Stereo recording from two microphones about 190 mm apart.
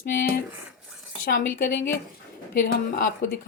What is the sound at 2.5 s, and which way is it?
Speech, 50° left (ahead or behind).